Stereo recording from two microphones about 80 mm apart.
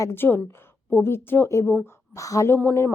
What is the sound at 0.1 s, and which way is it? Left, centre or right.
A woman's voice, left.